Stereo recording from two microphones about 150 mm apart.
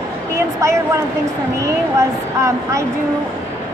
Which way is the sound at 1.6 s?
20° right (ahead or behind).